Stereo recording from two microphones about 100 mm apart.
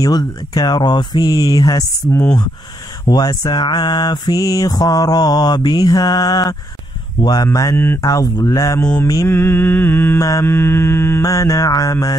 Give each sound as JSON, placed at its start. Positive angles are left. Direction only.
{"t": 0.0, "sound": "mantra", "side_deg": 40}
{"t": 3.1, "sound": "mantra", "side_deg": 40}
{"t": 7.7, "sound": "mantra", "side_deg": 25}
{"t": 8.0, "sound": "mantra", "side_deg": 35}
{"t": 9.2, "sound": "mantra", "side_deg": 20}
{"t": 10.1, "sound": "mantra", "side_deg": 35}
{"t": 10.4, "sound": "mantra", "side_deg": 25}